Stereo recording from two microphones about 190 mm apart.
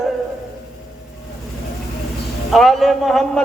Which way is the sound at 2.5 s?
Centre (ahead or behind).